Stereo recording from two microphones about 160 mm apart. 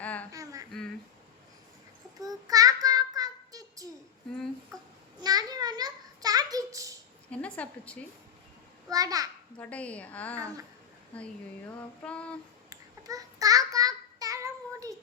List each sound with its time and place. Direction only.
0.0 s humming: 10° left (ahead or behind)
0.3 s humming: 20° right (ahead or behind)
2.1 s child singing: 20° right (ahead or behind)
5.2 s a sound: 25° right (ahead or behind)
7.3 s a sound: 10° left (ahead or behind)
8.9 s a child's voice: 20° right (ahead or behind)
9.6 s a woman's voice: 10° left (ahead or behind)
12.7 s child singing: 20° right (ahead or behind)